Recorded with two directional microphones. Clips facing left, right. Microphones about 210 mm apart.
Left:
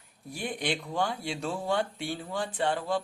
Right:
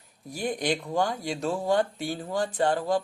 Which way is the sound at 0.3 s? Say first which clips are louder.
Right 4 dB; 40° right (ahead or behind).